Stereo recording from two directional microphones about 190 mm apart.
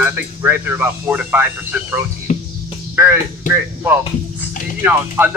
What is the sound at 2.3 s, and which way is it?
Music, 40° left (ahead or behind).